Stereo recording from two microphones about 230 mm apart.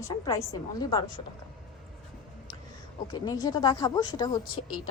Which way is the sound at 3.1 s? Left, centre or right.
Centre.